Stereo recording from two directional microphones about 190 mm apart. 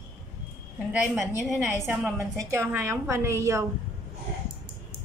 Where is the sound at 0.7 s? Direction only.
Centre (ahead or behind).